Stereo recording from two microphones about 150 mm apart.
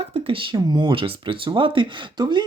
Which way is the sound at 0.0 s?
40° right (ahead or behind).